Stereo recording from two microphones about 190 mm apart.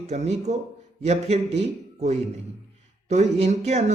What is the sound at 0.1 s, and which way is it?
A man's voice, 35° right (ahead or behind).